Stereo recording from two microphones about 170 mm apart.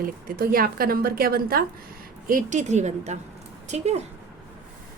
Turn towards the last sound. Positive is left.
turn(degrees=-40)  # may be behind; listen again after turning